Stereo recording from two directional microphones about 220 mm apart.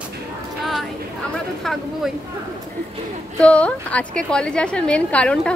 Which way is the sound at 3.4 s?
5° left (ahead or behind).